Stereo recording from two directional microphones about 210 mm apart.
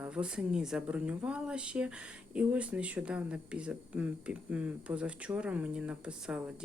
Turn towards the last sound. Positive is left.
turn(degrees=-5)  # may be behind; listen again after turning